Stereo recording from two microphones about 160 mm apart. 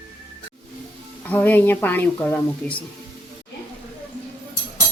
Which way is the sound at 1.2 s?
10° left (ahead or behind).